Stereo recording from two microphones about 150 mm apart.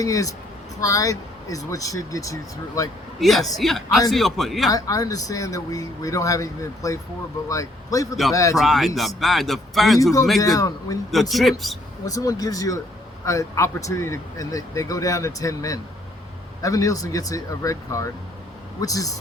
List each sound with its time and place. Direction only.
0.0 s speech: 20° left (ahead or behind)
3.2 s speech: centre (ahead or behind)
4.7 s speech: 25° left (ahead or behind)
8.5 s speech: centre (ahead or behind)
10.4 s speech: 25° left (ahead or behind)
11.1 s speech: centre (ahead or behind)
12.0 s speech: 25° left (ahead or behind)